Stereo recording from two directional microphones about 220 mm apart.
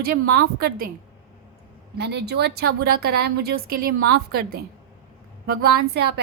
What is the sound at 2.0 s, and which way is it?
A woman's voice, 50° right (ahead or behind).